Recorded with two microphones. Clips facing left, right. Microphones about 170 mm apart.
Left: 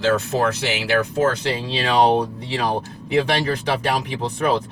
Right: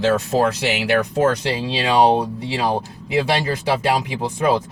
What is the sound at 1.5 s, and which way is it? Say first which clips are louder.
Speech: right 2 dB; 10° right (ahead or behind).